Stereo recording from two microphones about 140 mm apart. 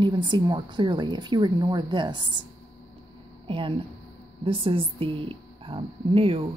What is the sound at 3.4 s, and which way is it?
Speech, 40° right (ahead or behind).